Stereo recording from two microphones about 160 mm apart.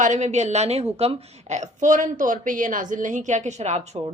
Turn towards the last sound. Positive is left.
turn(degrees=-45)  # may be behind; listen again after turning